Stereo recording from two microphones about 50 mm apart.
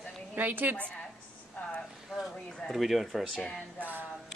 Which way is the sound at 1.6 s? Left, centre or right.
Left.